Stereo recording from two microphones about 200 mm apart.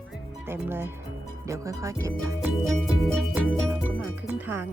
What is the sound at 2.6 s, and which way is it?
Speech, centre (ahead or behind).